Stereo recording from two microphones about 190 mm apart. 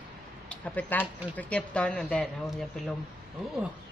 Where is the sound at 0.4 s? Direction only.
5° left (ahead or behind).